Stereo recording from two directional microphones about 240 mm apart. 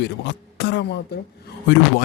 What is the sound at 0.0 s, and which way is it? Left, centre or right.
Speech, left.